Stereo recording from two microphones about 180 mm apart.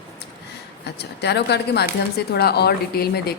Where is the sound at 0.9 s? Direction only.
70° left (ahead or behind).